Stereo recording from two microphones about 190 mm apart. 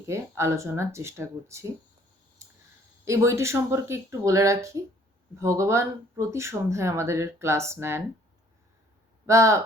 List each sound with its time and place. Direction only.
0.1 s speech: 15° right (ahead or behind)
3.0 s speech: 15° right (ahead or behind)
9.2 s speech: 15° right (ahead or behind)